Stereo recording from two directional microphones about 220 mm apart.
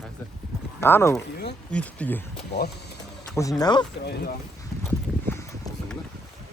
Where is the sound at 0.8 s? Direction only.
10° left (ahead or behind).